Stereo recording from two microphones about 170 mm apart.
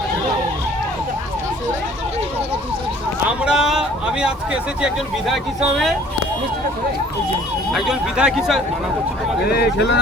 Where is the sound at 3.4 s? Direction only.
5° right (ahead or behind).